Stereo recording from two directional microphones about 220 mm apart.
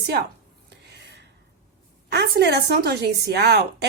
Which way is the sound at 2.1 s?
50° right (ahead or behind).